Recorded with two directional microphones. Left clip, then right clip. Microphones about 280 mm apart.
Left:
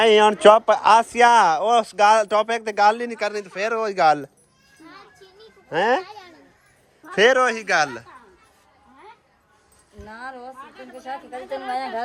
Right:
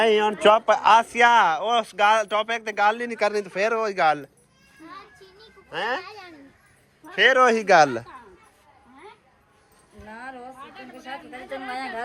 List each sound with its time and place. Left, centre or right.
0.0 s speech: centre
5.7 s speech: left
7.1 s speech: left
7.3 s speech: centre
10.1 s a sound: left
10.9 s speech: left